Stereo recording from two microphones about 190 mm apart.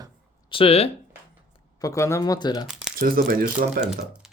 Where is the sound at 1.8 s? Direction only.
15° left (ahead or behind).